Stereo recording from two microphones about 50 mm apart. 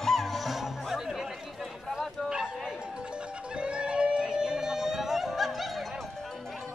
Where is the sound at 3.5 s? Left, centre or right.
Centre.